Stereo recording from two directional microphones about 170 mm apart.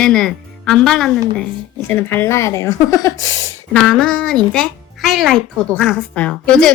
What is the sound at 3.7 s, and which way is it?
A woman's voice, 5° left (ahead or behind).